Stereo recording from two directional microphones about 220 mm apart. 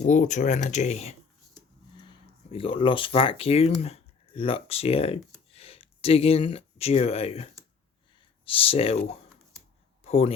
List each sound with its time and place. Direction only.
0.0 s a man's voice: 35° left (ahead or behind)